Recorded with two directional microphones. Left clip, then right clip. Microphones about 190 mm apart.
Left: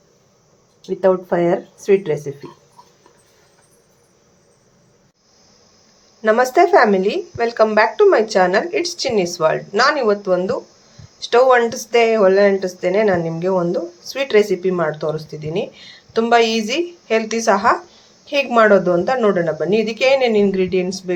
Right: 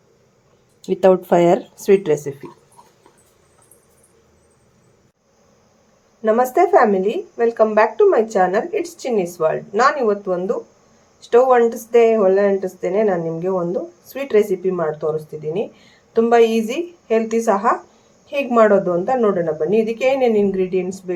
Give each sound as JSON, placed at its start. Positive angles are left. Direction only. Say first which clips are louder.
{"t": 0.8, "sound": "speech", "louder": "right 2 dB", "side_deg": -30}
{"t": 6.2, "sound": "speech", "louder": "left 2 dB", "side_deg": -5}